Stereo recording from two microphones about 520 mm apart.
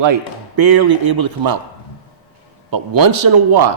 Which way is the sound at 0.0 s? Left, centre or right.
Right.